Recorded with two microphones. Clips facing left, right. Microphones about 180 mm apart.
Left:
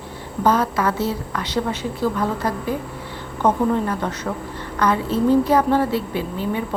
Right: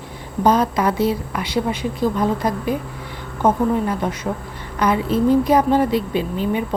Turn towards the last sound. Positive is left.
turn(degrees=-20)  # may be behind; listen again after turning